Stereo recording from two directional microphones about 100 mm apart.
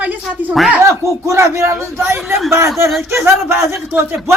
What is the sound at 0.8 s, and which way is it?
Speech, 30° right (ahead or behind).